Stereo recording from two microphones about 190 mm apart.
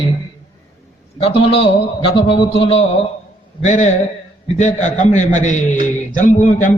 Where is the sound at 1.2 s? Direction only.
30° left (ahead or behind).